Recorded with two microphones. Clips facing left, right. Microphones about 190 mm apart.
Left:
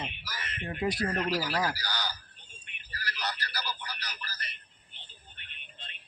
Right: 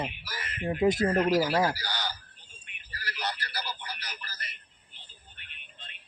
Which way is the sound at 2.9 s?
25° right (ahead or behind).